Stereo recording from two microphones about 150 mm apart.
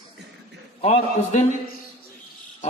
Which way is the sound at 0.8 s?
45° left (ahead or behind).